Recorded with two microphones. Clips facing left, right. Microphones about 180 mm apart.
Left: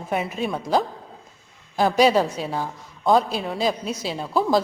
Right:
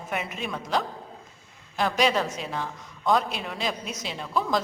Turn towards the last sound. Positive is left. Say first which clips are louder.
# left 6 dB
turn(degrees=35)  # may be behind; listen again after turning